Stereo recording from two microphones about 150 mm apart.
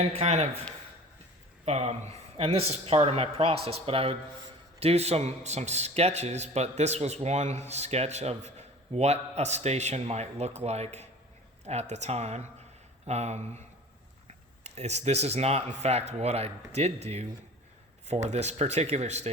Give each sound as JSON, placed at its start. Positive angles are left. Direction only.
{"t": 0.1, "sound": "speech", "side_deg": -45}
{"t": 1.6, "sound": "speech", "side_deg": -45}
{"t": 14.6, "sound": "speech", "side_deg": -45}